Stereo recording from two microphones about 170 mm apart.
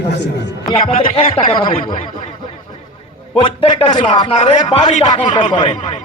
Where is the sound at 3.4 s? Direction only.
30° left (ahead or behind).